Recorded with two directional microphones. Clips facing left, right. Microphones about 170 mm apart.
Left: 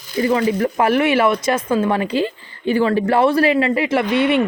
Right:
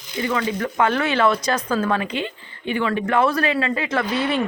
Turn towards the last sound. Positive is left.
turn(degrees=25)  # may be behind; listen again after turning